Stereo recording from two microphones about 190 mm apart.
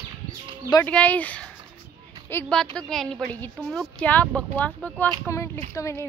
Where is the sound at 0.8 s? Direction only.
5° left (ahead or behind).